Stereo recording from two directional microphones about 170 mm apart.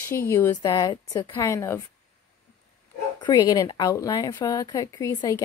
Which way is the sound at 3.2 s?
25° left (ahead or behind).